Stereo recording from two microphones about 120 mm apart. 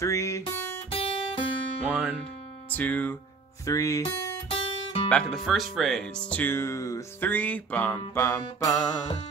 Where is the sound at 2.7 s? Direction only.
15° left (ahead or behind).